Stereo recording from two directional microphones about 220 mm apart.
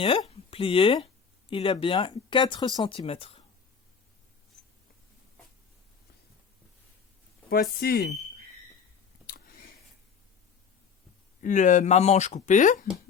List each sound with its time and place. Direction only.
0.0 s speech: 25° left (ahead or behind)
7.5 s speech: 45° left (ahead or behind)
9.2 s a sound: 40° left (ahead or behind)
11.3 s speech: 35° left (ahead or behind)